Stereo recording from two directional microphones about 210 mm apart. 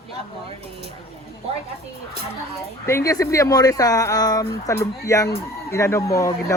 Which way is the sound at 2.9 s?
15° left (ahead or behind).